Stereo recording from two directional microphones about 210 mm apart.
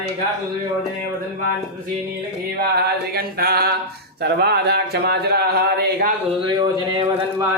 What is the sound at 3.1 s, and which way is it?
Speech, 45° right (ahead or behind).